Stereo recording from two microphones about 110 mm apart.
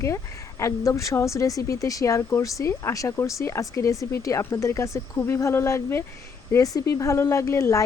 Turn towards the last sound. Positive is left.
turn(degrees=30)  # may be behind; listen again after turning